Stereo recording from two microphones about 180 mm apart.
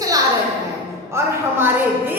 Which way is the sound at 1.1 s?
10° right (ahead or behind).